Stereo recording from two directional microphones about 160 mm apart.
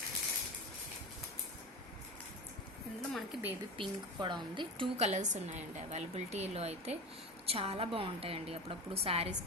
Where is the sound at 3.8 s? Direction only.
30° right (ahead or behind).